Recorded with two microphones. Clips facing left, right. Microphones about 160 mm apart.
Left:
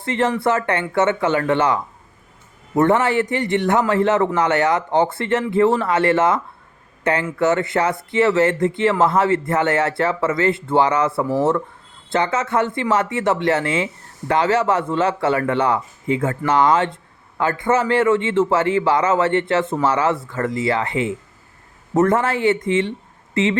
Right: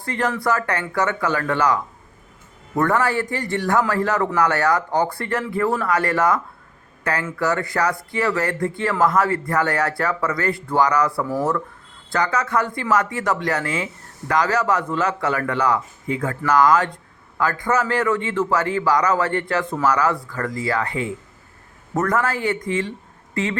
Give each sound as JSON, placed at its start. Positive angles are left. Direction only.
{"t": 0.0, "sound": "speech", "side_deg": 25}